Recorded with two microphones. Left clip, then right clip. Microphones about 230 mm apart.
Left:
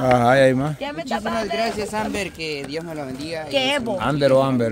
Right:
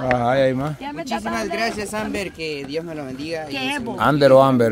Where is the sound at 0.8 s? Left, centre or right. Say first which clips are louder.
Left 1 dB; left.